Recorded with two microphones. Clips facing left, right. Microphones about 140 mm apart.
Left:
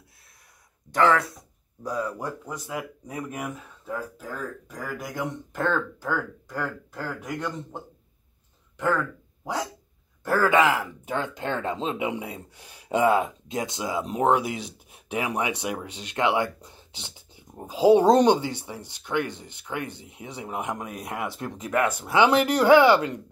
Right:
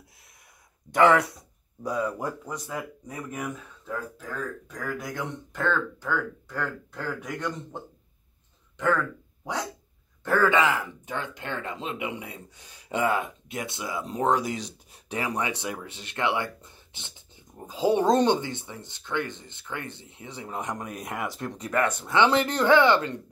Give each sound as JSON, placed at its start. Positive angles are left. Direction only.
{"t": 0.9, "sound": "speech", "side_deg": -15}
{"t": 1.8, "sound": "speech", "side_deg": 0}
{"t": 3.1, "sound": "speech", "side_deg": 15}
{"t": 3.3, "sound": "speech", "side_deg": 5}
{"t": 10.2, "sound": "speech", "side_deg": 15}